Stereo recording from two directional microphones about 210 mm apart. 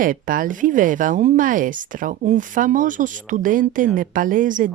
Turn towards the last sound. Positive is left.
turn(degrees=-40)  # may be behind; listen again after turning